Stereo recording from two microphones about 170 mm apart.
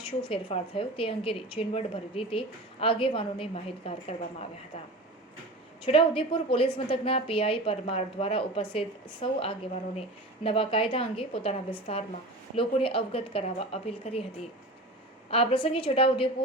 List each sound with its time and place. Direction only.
0.2 s a woman's voice: 30° left (ahead or behind)
5.8 s a woman's voice: 30° left (ahead or behind)
15.3 s a woman's voice: 35° left (ahead or behind)